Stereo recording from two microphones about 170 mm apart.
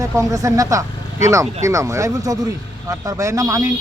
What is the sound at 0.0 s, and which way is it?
A man's voice, 20° right (ahead or behind).